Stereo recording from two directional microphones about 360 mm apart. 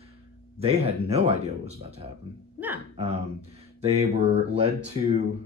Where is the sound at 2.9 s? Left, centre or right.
Centre.